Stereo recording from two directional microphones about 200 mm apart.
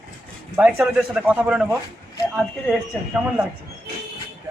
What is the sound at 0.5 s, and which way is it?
A man's voice, 5° right (ahead or behind).